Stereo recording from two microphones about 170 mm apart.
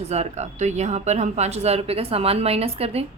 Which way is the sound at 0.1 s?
40° right (ahead or behind).